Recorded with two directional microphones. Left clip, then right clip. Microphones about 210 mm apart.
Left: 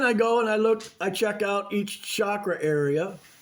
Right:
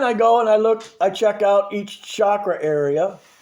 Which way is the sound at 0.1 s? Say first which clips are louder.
Right 8 dB; 20° left (ahead or behind).